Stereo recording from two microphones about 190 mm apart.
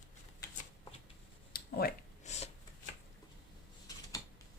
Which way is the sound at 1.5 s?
55° left (ahead or behind).